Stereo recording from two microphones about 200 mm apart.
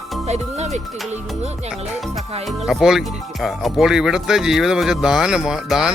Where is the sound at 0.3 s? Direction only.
35° right (ahead or behind).